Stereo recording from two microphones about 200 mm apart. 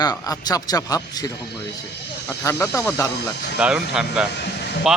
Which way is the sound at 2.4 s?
15° left (ahead or behind).